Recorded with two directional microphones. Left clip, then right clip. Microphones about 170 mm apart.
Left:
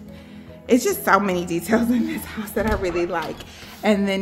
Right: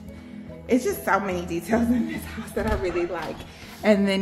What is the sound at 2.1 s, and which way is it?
Speech, 60° left (ahead or behind).